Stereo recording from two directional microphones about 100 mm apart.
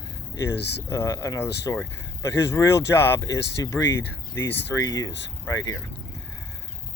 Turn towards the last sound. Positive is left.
turn(degrees=40)  # may be behind; listen again after turning